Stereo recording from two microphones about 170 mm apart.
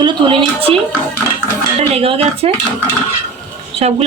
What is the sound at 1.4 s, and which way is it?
Speech, 35° right (ahead or behind).